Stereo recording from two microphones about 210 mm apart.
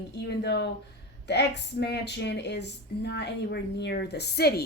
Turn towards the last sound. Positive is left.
turn(degrees=50)  # may be behind; listen again after turning